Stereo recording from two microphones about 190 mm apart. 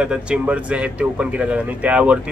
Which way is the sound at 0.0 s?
5° right (ahead or behind).